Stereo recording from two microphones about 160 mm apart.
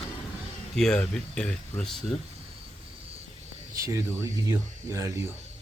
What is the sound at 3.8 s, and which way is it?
Speech, 20° right (ahead or behind).